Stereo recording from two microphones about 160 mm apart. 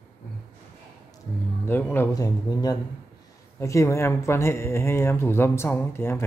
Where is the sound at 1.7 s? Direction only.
15° left (ahead or behind).